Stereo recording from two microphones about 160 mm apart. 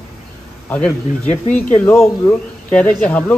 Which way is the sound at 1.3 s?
50° left (ahead or behind).